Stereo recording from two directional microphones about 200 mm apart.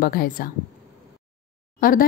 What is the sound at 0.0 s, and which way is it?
Speech, 45° left (ahead or behind).